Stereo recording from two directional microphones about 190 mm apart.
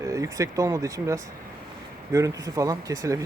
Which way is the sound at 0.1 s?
15° right (ahead or behind).